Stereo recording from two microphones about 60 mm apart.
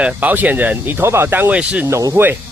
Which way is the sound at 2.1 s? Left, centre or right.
Right.